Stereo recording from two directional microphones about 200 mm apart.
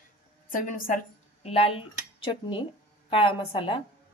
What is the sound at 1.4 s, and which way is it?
Speech, 30° left (ahead or behind).